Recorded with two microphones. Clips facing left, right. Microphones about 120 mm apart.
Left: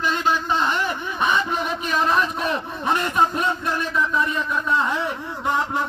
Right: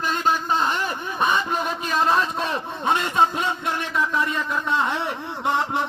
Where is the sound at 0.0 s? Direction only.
45° right (ahead or behind).